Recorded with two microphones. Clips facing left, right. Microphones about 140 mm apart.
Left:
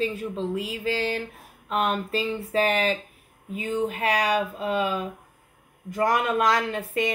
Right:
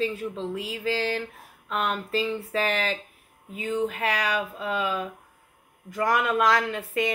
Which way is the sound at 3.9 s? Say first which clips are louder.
Left 3 dB; 30° left (ahead or behind).